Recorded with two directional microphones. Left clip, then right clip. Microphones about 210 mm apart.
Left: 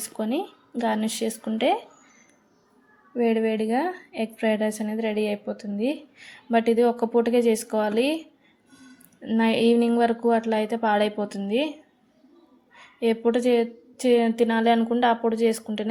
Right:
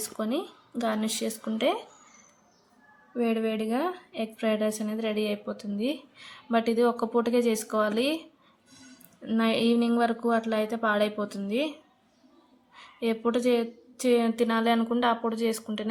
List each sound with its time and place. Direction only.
0.2 s a woman's voice: 10° left (ahead or behind)
3.2 s a woman's voice: 10° left (ahead or behind)
9.2 s a woman's voice: 10° left (ahead or behind)
13.0 s a woman's voice: 10° left (ahead or behind)